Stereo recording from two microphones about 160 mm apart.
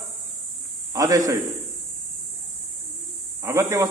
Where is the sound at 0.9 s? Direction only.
20° right (ahead or behind).